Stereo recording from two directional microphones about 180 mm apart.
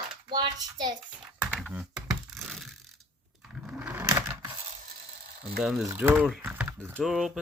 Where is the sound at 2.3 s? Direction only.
Centre (ahead or behind).